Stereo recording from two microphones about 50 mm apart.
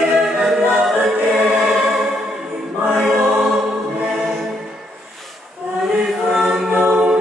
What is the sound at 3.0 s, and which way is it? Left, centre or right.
Choir, centre.